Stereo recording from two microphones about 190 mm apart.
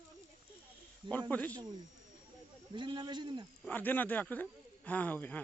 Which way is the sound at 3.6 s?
10° left (ahead or behind).